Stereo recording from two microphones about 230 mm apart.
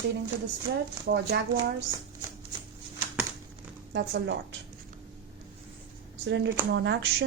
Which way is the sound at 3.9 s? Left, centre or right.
Right.